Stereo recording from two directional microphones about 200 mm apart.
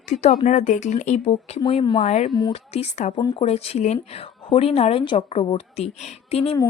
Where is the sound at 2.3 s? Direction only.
25° left (ahead or behind).